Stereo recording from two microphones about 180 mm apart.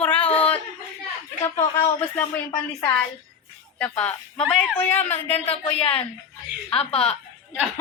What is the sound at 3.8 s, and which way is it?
A woman's voice, 5° left (ahead or behind).